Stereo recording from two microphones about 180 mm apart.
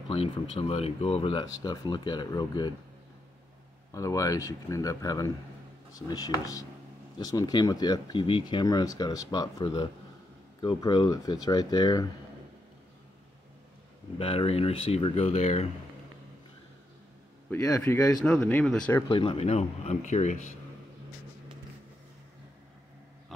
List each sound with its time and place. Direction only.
0.1 s speech: 30° left (ahead or behind)
3.9 s speech: 20° left (ahead or behind)
14.1 s speech: 30° left (ahead or behind)
17.5 s speech: 15° left (ahead or behind)
18.2 s speech: 5° left (ahead or behind)
19.0 s speech: 30° left (ahead or behind)